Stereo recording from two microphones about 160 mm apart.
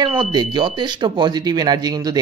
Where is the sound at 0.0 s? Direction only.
30° right (ahead or behind).